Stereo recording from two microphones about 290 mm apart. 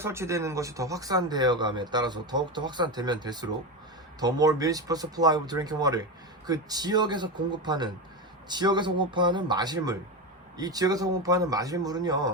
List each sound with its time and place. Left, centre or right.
0.0 s speech: centre